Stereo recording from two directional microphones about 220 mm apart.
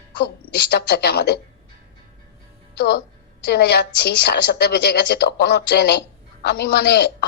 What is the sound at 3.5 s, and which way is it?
A woman's voice, 45° left (ahead or behind).